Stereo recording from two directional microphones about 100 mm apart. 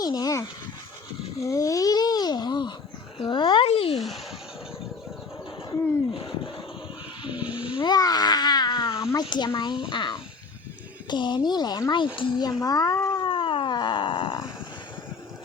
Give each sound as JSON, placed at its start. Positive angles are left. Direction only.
{"t": 0.0, "sound": "a child's voice", "side_deg": 40}
{"t": 1.4, "sound": "babbling", "side_deg": 35}
{"t": 3.2, "sound": "speech", "side_deg": 50}
{"t": 3.7, "sound": "speech", "side_deg": 75}
{"t": 6.1, "sound": "a sound", "side_deg": 65}
{"t": 7.9, "sound": "babbling", "side_deg": 40}
{"t": 9.1, "sound": "speech", "side_deg": 45}
{"t": 12.4, "sound": "a child's voice", "side_deg": 40}
{"t": 13.1, "sound": "dog", "side_deg": 55}